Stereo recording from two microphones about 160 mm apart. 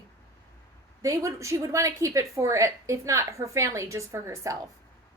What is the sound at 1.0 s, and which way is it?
A woman's voice, 20° right (ahead or behind).